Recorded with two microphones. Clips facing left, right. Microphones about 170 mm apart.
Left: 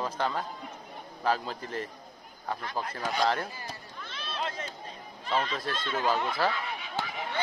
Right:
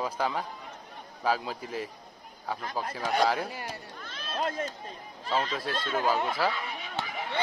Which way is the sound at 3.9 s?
50° right (ahead or behind).